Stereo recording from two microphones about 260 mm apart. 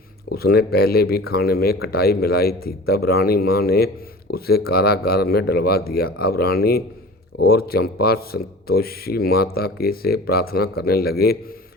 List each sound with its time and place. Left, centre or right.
0.3 s speech: left